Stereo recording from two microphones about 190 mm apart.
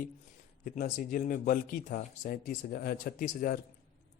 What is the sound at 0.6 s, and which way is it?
Speech, 45° left (ahead or behind).